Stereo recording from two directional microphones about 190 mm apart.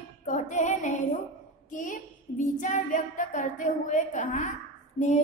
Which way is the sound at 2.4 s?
40° left (ahead or behind).